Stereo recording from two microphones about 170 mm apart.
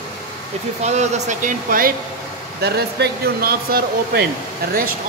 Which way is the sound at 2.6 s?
70° right (ahead or behind).